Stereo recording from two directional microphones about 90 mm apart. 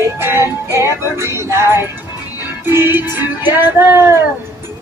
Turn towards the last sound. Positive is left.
turn(degrees=-30)  # may be behind; listen again after turning